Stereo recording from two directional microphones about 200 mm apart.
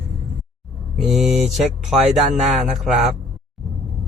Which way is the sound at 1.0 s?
Centre (ahead or behind).